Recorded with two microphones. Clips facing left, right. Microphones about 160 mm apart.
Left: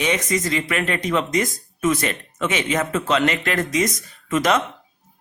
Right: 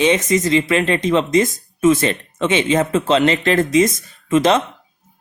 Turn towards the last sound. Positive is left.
turn(degrees=-25)  # may be behind; listen again after turning